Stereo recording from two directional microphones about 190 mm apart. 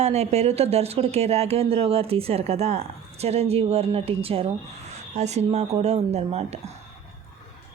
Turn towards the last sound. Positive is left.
turn(degrees=-35)  # may be behind; listen again after turning